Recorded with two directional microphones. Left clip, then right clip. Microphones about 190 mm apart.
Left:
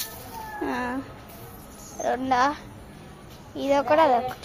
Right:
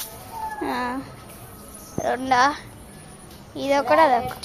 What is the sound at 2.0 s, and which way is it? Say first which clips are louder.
Speech: right 3 dB; 5° left (ahead or behind).